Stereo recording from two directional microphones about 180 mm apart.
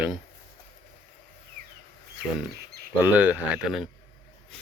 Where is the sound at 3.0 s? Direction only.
10° right (ahead or behind).